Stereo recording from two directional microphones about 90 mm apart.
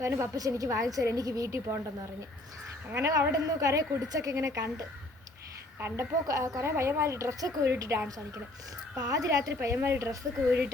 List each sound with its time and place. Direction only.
0.0 s a woman's voice: 35° right (ahead or behind)
2.9 s a woman's voice: 35° right (ahead or behind)
5.8 s a woman's voice: 35° right (ahead or behind)
9.6 s speech: 25° right (ahead or behind)